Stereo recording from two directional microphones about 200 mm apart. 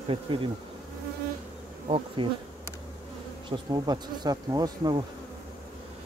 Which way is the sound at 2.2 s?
25° right (ahead or behind).